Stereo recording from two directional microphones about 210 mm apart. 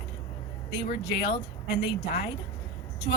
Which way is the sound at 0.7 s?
55° left (ahead or behind).